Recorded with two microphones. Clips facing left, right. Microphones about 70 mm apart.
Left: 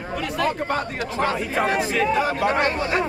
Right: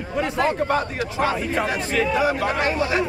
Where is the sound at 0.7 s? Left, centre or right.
Centre.